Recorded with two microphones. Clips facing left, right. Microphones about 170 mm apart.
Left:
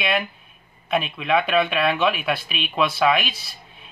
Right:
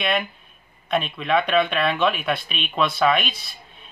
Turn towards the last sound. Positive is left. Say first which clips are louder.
# even
turn(degrees=0)  # may be behind; listen again after turning